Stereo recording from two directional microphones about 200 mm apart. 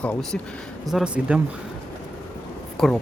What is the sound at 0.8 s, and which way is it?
Speech, 5° right (ahead or behind).